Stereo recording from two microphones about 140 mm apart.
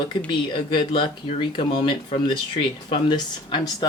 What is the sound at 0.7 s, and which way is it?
Speech, 35° left (ahead or behind).